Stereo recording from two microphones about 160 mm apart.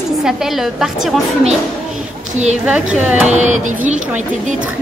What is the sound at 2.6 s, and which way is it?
Speech, 10° right (ahead or behind).